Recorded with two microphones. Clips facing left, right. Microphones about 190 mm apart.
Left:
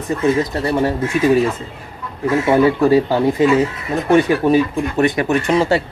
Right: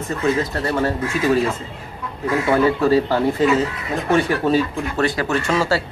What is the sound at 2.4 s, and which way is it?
Speech, 20° left (ahead or behind).